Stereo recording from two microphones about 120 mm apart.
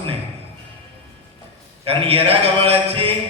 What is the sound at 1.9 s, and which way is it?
A man's voice, 55° right (ahead or behind).